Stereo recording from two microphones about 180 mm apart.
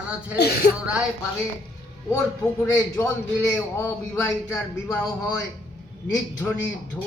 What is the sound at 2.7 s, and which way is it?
A man's voice, 15° left (ahead or behind).